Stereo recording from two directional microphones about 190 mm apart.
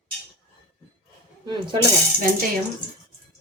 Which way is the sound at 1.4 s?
25° right (ahead or behind).